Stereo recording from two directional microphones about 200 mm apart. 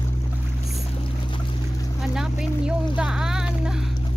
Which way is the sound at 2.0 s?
5° right (ahead or behind).